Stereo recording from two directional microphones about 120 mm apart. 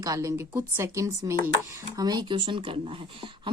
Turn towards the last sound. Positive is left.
turn(degrees=-50)  # may be behind; listen again after turning